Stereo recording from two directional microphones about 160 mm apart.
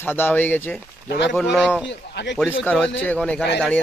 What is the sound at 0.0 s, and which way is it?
Speech, 15° left (ahead or behind).